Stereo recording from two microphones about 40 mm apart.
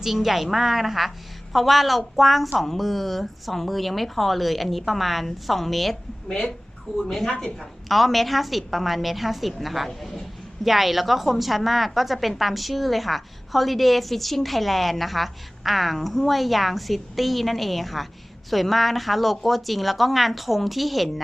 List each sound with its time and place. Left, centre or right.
0.0 s a woman's voice: centre
7.0 s a woman's voice: centre
7.3 s a woman's voice: centre
7.6 s a woman's voice: centre